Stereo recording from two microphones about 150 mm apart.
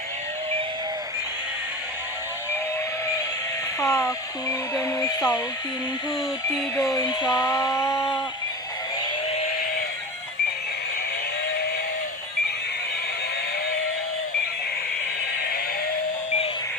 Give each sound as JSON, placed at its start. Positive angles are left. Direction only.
{"t": 3.8, "sound": "speech", "side_deg": 20}
{"t": 6.7, "sound": "speech", "side_deg": 25}
{"t": 7.9, "sound": "a sound", "side_deg": 0}